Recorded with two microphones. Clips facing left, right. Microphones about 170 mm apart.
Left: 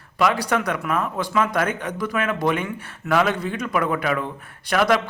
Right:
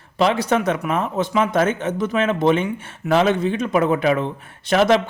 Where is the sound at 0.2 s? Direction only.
25° right (ahead or behind).